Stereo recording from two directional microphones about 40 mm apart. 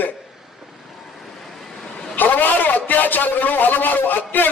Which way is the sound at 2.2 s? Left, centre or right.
Left.